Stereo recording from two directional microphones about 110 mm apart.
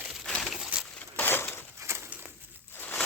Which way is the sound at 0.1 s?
5° left (ahead or behind).